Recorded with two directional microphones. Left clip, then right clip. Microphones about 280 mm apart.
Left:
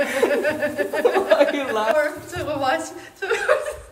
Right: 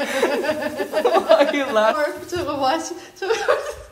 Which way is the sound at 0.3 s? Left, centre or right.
Centre.